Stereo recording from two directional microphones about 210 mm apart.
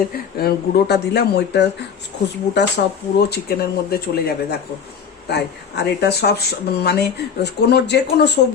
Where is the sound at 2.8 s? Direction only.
45° left (ahead or behind).